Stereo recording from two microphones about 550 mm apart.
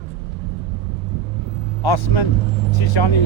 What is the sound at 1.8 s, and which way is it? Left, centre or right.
Speech, left.